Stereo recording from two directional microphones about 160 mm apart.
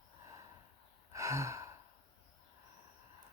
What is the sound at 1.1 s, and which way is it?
Gasp, 20° right (ahead or behind).